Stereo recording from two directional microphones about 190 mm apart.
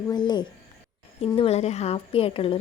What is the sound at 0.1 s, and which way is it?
Speech, 25° left (ahead or behind).